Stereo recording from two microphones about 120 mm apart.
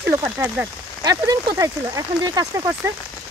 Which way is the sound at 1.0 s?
30° right (ahead or behind).